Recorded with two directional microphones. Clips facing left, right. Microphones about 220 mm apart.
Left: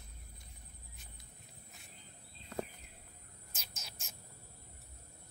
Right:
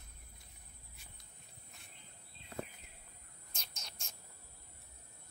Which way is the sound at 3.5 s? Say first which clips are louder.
Left 1 dB; 5° left (ahead or behind).